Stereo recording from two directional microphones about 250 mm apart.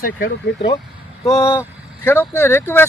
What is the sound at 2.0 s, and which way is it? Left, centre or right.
Speech, centre.